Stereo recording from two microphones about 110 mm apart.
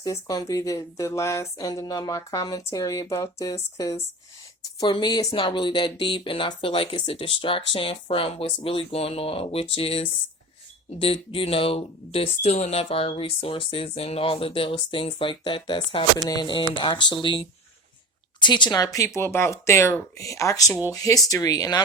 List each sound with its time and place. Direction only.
0.0 s speech: 35° left (ahead or behind)
5.3 s speech: 50° left (ahead or behind)
16.1 s speech: 35° left (ahead or behind)